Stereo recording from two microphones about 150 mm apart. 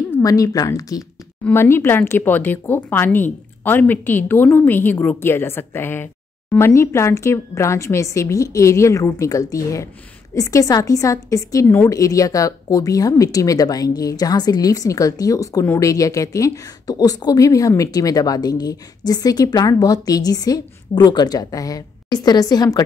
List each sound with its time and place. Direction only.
0.2 s a woman's voice: 25° left (ahead or behind)